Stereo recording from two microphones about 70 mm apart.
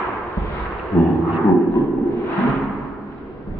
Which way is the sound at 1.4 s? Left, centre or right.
Left.